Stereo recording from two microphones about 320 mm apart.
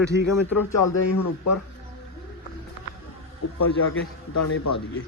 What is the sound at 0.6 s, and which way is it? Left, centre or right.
Speech, left.